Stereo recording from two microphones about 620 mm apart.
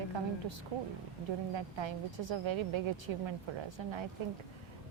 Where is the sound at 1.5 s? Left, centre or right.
Right.